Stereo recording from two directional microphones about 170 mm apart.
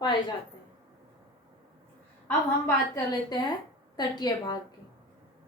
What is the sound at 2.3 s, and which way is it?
A woman's voice, 20° left (ahead or behind).